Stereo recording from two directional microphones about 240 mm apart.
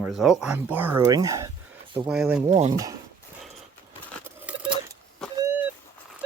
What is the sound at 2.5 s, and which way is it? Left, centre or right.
Speech, right.